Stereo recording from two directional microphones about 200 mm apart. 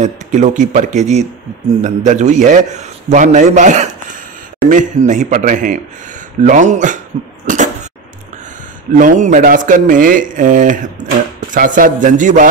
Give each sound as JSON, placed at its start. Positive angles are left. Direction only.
{"t": 0.0, "sound": "a man's voice", "side_deg": -35}
{"t": 7.4, "sound": "a sound", "side_deg": -40}
{"t": 8.9, "sound": "a man's voice", "side_deg": -40}